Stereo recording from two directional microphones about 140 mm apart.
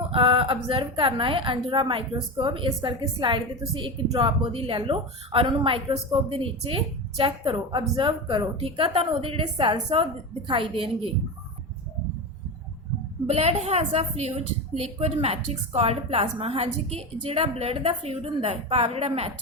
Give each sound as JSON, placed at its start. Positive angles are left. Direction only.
{"t": 0.1, "sound": "a woman's voice", "side_deg": -40}
{"t": 13.2, "sound": "a woman's voice", "side_deg": -45}